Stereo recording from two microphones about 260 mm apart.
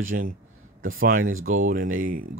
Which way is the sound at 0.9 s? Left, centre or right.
Right.